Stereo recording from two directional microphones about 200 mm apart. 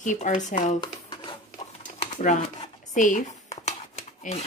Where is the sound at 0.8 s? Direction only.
25° left (ahead or behind).